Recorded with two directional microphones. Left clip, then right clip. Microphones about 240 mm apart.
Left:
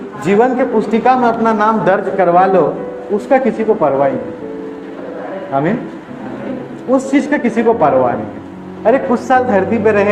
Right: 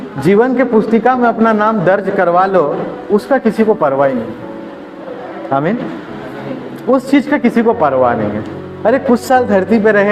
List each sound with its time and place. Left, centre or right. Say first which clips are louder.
0.3 s a man's voice: right 1 dB; right
5.5 s a man's voice: right 1 dB; right
7.1 s a man's voice: right 2 dB; right